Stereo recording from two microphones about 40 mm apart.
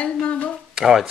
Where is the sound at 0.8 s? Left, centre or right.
Centre.